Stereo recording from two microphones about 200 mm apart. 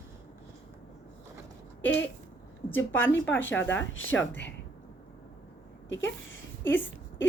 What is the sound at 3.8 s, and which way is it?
Speech, 80° left.